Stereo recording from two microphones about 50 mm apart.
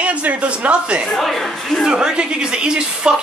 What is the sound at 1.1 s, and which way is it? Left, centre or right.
Speech, centre.